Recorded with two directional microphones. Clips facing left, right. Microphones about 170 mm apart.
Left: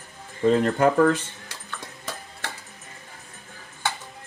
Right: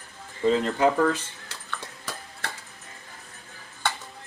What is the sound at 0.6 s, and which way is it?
Speech, 50° left (ahead or behind).